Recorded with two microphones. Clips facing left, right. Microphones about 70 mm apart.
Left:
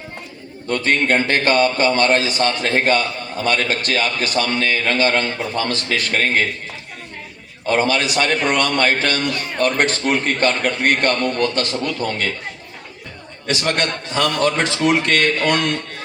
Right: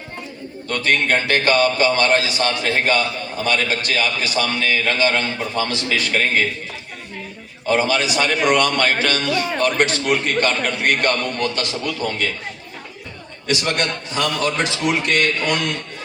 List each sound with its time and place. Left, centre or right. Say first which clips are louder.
0.7 s speech: left 1 dB; left
7.7 s a man's voice: even; left
13.5 s speech: left 1 dB; left
15.1 s a man's voice: left 2 dB; left